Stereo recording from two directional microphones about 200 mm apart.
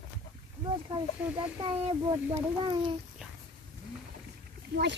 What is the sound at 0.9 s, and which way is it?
A child's voice, 25° right (ahead or behind).